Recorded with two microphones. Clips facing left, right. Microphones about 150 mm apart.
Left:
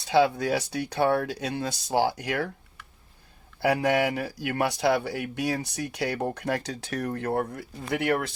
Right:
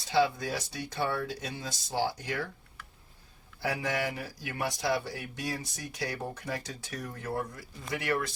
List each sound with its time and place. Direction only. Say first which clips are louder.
0.1 s speech: left 6 dB; 70° left (ahead or behind)
3.6 s speech: left 9 dB; 65° left (ahead or behind)